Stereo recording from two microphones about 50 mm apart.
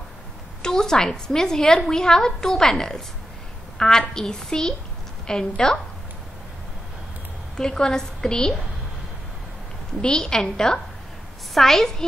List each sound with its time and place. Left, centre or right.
0.6 s a woman's voice: centre
7.5 s a woman's voice: centre
10.0 s a woman's voice: centre